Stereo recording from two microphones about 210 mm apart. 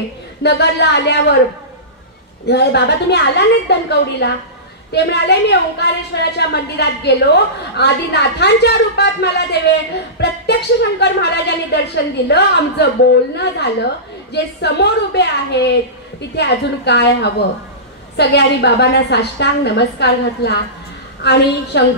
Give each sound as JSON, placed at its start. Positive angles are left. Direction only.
{"t": 0.4, "sound": "a woman's voice", "side_deg": 55}
{"t": 2.4, "sound": "a woman's voice", "side_deg": 55}